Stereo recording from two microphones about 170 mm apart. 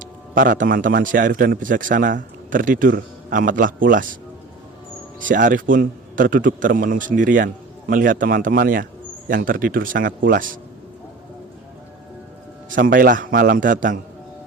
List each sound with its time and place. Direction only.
0.0 s a man's voice: 55° right (ahead or behind)
5.3 s a man's voice: 50° right (ahead or behind)
12.7 s a man's voice: 55° right (ahead or behind)